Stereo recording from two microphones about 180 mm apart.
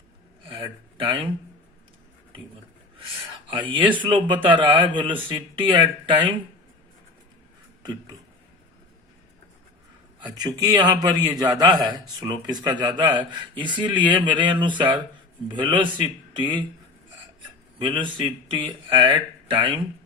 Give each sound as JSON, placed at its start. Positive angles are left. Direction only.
{"t": 0.4, "sound": "a sound", "side_deg": -30}
{"t": 3.4, "sound": "a man's voice", "side_deg": -25}
{"t": 10.2, "sound": "a man's voice", "side_deg": -20}
{"t": 17.7, "sound": "a man's voice", "side_deg": -25}